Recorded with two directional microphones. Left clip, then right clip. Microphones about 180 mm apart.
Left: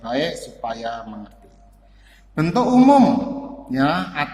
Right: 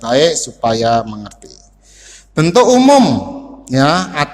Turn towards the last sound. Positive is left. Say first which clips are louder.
# right 7 dB
turn(degrees=-50)  # may be behind; listen again after turning